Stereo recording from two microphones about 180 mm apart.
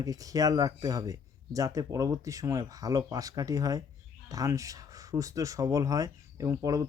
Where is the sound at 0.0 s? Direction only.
20° right (ahead or behind).